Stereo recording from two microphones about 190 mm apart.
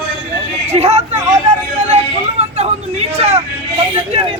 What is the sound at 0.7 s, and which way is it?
Hubbub, 35° right (ahead or behind).